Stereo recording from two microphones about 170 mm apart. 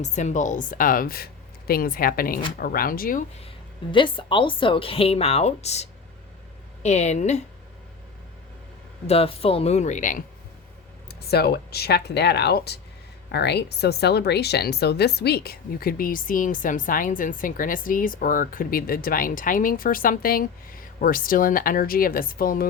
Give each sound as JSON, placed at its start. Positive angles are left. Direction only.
{"t": 0.0, "sound": "speech", "side_deg": 45}
{"t": 3.9, "sound": "a woman's voice", "side_deg": 30}
{"t": 9.0, "sound": "a woman's voice", "side_deg": 35}
{"t": 11.1, "sound": "speech", "side_deg": 70}